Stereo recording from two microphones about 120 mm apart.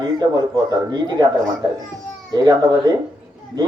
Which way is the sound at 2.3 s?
30° right (ahead or behind).